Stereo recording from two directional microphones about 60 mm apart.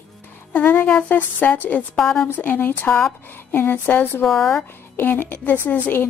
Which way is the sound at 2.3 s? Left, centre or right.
Left.